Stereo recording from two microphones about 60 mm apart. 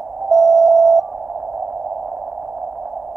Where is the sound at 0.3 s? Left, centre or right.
Right.